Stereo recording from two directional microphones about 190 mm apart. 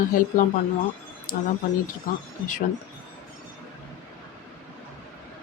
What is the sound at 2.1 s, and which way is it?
Speech, 45° left (ahead or behind).